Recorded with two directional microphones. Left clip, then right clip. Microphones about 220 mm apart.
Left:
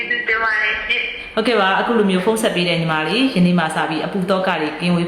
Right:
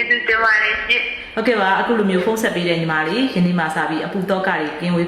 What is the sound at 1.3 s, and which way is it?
A woman's voice, 10° left (ahead or behind).